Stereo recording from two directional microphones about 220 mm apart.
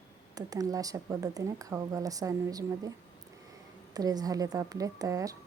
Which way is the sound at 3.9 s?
15° right (ahead or behind).